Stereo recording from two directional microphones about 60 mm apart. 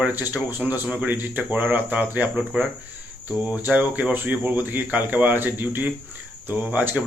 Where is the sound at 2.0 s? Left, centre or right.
Centre.